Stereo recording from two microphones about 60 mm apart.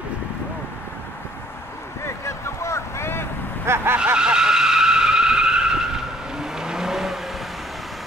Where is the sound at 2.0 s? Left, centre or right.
Left.